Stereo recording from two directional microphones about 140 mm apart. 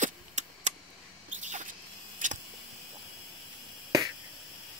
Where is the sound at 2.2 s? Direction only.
65° right (ahead or behind).